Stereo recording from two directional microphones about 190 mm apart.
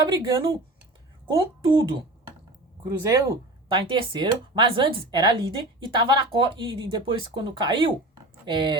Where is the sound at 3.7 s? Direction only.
25° right (ahead or behind).